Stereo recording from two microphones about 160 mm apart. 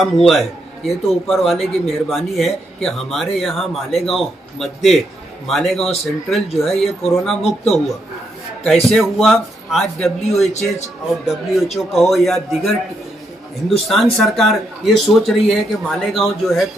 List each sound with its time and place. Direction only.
0.0 s a man's voice: centre (ahead or behind)
8.8 s a man's voice: centre (ahead or behind)
10.5 s a man's voice: 45° left (ahead or behind)
11.2 s a man's voice: centre (ahead or behind)
13.7 s a man's voice: centre (ahead or behind)